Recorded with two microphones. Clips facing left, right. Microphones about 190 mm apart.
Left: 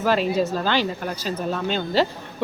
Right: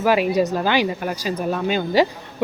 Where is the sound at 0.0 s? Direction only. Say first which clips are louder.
Right 3 dB; 10° right (ahead or behind).